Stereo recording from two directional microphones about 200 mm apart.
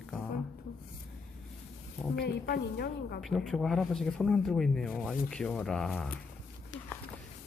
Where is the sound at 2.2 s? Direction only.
50° left (ahead or behind).